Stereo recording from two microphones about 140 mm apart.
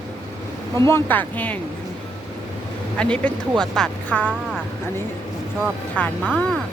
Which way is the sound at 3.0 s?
10° left (ahead or behind).